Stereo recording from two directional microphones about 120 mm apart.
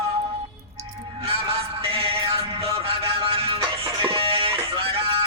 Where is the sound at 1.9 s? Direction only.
50° right (ahead or behind).